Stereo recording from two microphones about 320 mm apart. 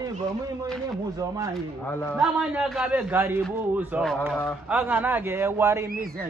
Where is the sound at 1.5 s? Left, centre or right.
Centre.